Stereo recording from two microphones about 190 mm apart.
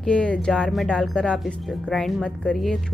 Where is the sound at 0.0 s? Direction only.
5° left (ahead or behind).